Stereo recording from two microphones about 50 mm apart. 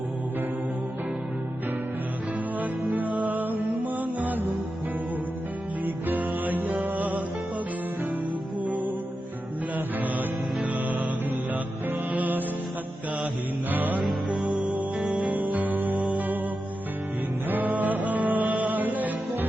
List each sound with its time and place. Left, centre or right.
2.9 s music: right
5.8 s music: right
9.7 s music: right
13.7 s music: right
14.3 s music: centre
15.2 s music: right
17.5 s music: right